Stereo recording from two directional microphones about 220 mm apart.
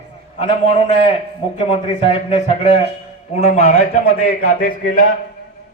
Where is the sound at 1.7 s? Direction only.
25° left (ahead or behind).